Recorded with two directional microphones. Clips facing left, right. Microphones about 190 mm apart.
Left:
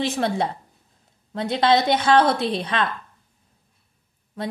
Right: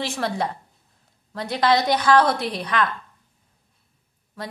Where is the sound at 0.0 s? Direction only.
20° left (ahead or behind).